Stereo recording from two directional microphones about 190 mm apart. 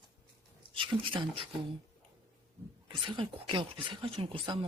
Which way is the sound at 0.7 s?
25° right (ahead or behind).